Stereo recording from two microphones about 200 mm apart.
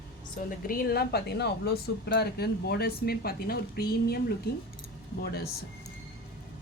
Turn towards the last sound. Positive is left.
turn(degrees=50)  # may be behind; listen again after turning